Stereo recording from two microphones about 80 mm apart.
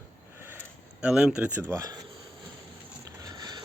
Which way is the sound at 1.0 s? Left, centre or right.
Centre.